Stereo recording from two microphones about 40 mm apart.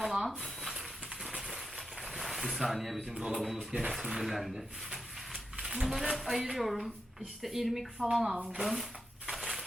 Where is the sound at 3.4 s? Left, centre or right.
Centre.